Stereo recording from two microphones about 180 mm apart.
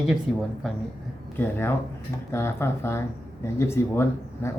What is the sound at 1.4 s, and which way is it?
Speech, 10° left (ahead or behind).